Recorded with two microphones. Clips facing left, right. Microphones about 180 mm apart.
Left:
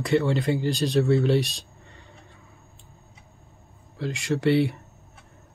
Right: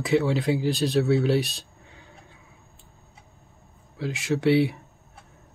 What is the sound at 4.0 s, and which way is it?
Speech, centre (ahead or behind).